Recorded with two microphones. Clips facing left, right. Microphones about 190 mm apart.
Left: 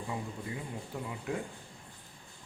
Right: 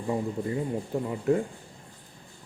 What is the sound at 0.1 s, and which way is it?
Speech, 45° right (ahead or behind).